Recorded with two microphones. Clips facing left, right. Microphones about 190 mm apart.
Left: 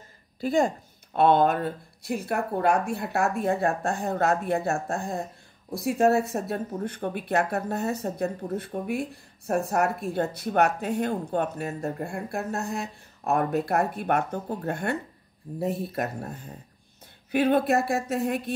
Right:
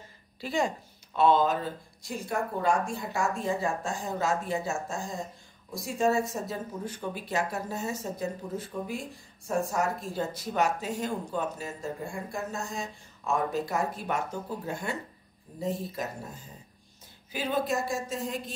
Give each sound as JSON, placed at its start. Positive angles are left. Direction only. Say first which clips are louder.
{"t": 0.4, "sound": "speech", "louder": "left 6 dB", "side_deg": 50}